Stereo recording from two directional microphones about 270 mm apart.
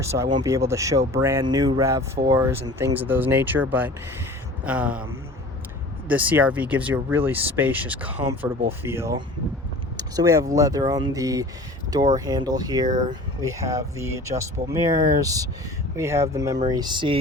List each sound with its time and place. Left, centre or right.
0.0 s speech: centre
6.1 s speech: centre